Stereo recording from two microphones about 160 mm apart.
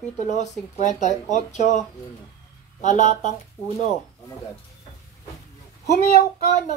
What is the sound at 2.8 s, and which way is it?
Speech, 50° left (ahead or behind).